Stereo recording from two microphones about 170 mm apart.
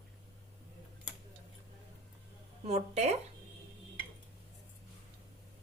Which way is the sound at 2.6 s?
40° right (ahead or behind).